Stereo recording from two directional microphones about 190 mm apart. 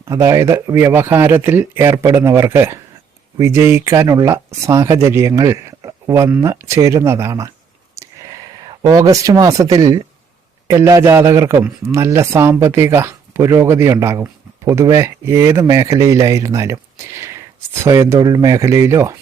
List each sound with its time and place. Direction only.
0.0 s speech: 15° right (ahead or behind)
7.9 s a sound: 20° right (ahead or behind)
10.7 s speech: 15° right (ahead or behind)